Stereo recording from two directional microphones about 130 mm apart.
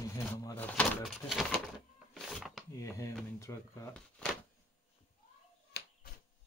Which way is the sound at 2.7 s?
20° left (ahead or behind).